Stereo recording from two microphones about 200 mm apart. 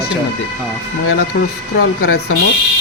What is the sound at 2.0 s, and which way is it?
Speech, 90° left.